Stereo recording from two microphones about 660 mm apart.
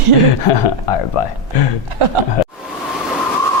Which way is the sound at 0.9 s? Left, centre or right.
Left.